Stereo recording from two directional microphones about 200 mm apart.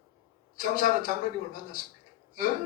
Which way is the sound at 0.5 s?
45° left (ahead or behind).